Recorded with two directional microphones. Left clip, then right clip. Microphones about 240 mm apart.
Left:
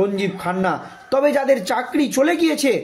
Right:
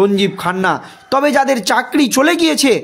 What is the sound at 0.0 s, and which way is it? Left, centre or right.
Speech, right.